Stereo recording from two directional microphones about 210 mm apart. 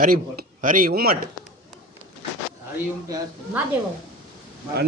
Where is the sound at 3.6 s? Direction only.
5° right (ahead or behind).